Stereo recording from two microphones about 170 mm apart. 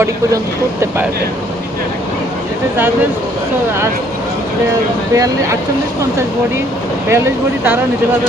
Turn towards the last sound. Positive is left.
turn(degrees=-15)  # may be behind; listen again after turning